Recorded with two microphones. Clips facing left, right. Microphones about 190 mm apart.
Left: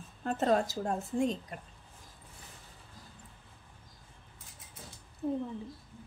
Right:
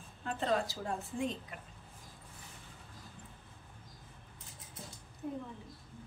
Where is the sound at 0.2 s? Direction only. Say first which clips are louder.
Left 5 dB; 45° left (ahead or behind).